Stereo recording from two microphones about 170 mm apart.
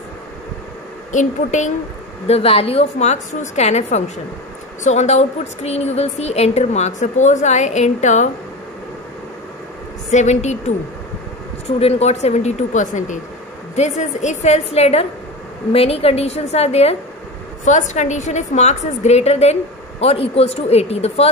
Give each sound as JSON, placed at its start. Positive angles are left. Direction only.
{"t": 1.1, "sound": "a woman's voice", "side_deg": 45}
{"t": 10.0, "sound": "a woman's voice", "side_deg": 45}
{"t": 11.8, "sound": "a woman's voice", "side_deg": 40}